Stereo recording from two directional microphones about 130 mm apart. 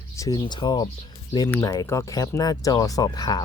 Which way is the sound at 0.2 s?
30° left (ahead or behind).